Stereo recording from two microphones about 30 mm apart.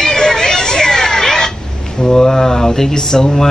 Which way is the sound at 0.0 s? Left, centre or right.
Left.